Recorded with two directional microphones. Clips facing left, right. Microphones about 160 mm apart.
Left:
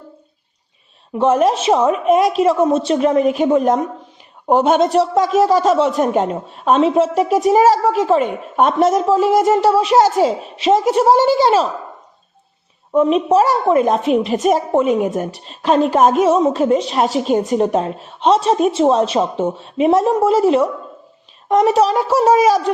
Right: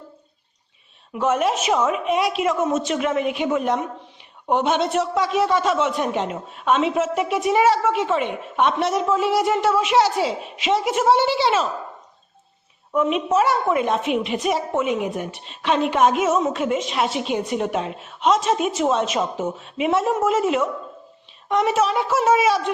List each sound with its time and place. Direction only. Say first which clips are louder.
1.1 s a woman's voice: left 6 dB; 35° left (ahead or behind)
12.9 s a woman's voice: left 7 dB; 35° left (ahead or behind)